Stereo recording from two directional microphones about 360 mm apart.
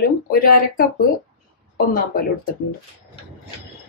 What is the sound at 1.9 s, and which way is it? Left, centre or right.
Speech, left.